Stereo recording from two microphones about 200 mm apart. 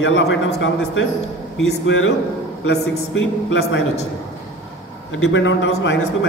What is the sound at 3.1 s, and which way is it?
Speech, 70° left (ahead or behind).